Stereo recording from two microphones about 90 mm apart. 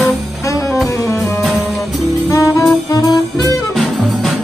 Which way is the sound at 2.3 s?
40° left (ahead or behind).